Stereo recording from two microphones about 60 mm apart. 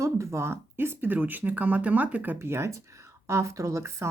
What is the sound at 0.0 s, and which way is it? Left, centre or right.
Speech, right.